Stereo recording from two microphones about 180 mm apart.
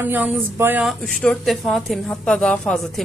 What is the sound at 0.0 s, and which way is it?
Speech, 10° right (ahead or behind).